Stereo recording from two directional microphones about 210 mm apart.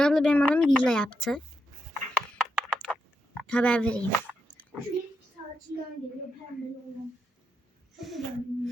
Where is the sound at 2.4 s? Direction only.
5° left (ahead or behind).